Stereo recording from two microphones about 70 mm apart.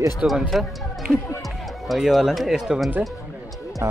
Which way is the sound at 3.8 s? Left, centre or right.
Right.